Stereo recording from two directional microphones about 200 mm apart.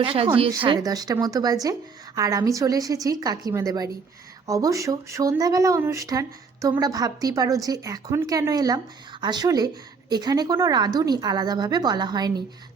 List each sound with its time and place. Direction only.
0.0 s speech: 25° right (ahead or behind)